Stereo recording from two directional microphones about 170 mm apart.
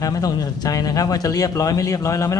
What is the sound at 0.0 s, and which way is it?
A man's voice, 20° left (ahead or behind).